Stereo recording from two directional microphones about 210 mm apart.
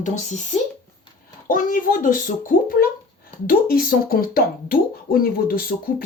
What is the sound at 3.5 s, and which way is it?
A woman's voice, 45° left (ahead or behind).